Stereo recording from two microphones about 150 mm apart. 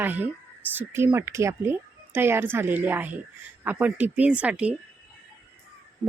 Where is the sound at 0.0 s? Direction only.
10° right (ahead or behind).